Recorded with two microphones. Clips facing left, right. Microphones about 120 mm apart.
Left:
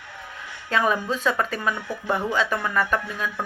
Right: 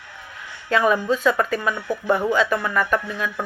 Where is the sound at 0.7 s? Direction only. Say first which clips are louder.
Right 4 dB; 35° left (ahead or behind).